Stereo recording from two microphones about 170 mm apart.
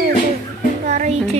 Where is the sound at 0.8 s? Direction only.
45° right (ahead or behind).